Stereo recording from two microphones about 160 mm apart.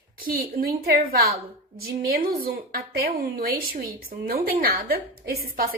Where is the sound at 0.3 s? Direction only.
70° right (ahead or behind).